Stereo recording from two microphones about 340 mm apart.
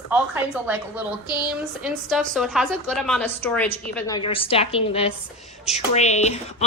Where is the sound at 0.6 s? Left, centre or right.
Centre.